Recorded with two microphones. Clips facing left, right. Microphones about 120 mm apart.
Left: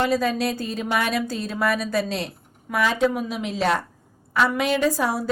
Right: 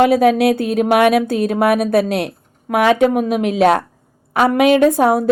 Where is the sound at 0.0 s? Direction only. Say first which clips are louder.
Right 10 dB; 65° right (ahead or behind).